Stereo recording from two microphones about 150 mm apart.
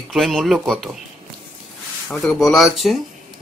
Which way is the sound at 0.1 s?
Centre (ahead or behind).